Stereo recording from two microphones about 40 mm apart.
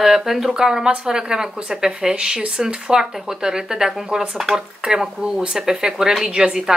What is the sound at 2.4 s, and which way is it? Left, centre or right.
Speech, right.